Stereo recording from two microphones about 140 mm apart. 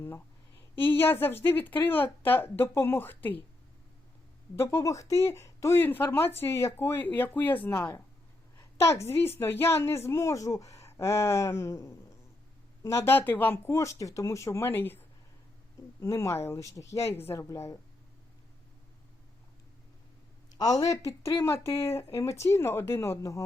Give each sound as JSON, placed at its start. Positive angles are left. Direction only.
{"t": 0.0, "sound": "speech", "side_deg": 15}
{"t": 4.5, "sound": "a woman's voice", "side_deg": 20}
{"t": 20.6, "sound": "a woman's voice", "side_deg": 25}